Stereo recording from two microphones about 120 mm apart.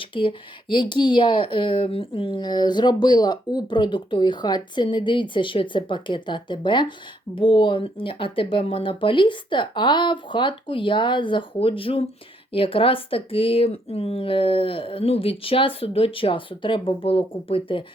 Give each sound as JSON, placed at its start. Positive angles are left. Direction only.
{"t": 0.0, "sound": "speech", "side_deg": 45}